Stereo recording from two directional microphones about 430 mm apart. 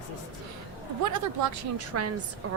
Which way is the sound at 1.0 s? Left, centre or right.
Right.